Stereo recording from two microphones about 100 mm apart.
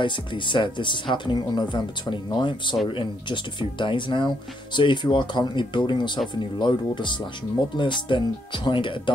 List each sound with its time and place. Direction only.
0.0 s speech: 55° left (ahead or behind)